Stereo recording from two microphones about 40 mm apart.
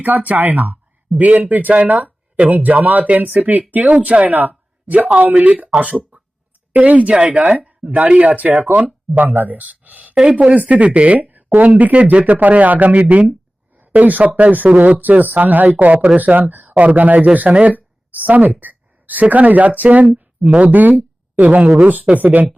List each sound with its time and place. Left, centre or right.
0.0 s speech: right
1.8 s a sound: right
2.5 s speech: right
4.4 s speech: right
7.1 s speech: right
7.3 s speech: right
16.4 s speech: right